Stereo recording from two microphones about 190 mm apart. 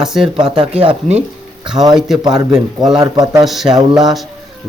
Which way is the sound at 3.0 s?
20° right (ahead or behind).